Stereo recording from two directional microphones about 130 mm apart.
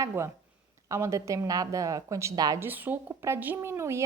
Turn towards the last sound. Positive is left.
turn(degrees=-20)  # may be behind; listen again after turning